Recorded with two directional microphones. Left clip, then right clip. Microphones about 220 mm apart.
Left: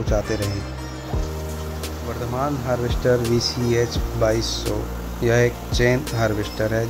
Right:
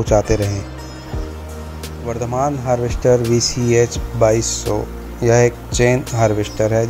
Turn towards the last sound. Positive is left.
turn(degrees=-15)  # may be behind; listen again after turning